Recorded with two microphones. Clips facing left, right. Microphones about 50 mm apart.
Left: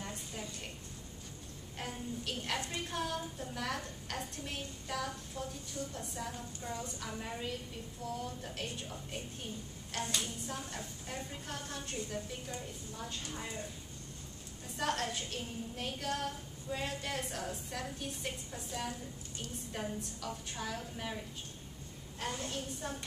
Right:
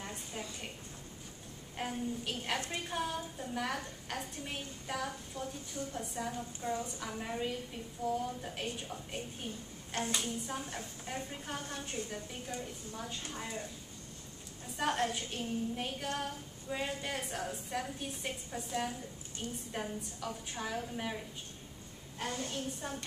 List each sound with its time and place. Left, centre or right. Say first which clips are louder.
0.0 s a sound: right 1 dB; centre
1.8 s a woman's voice: right 4 dB; centre
5.4 s a woman's voice: right 1 dB; centre
5.9 s a woman's voice: right 3 dB; centre
9.9 s a woman's voice: right 2 dB; centre
14.8 s a woman's voice: right 2 dB; centre
22.2 s a woman's voice: right 1 dB; centre